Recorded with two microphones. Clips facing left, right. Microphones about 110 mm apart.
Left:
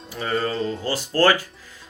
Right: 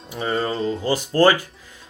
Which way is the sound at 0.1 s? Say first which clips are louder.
Right 1 dB; 30° right (ahead or behind).